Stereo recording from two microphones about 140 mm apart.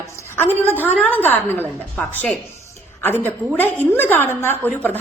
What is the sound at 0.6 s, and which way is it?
A woman's voice, 15° left (ahead or behind).